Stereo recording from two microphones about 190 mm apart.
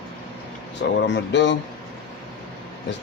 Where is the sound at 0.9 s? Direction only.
70° left (ahead or behind).